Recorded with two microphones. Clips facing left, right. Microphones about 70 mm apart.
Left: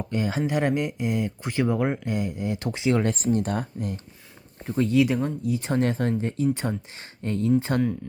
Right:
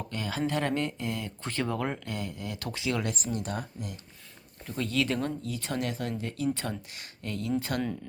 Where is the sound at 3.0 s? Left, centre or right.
Left.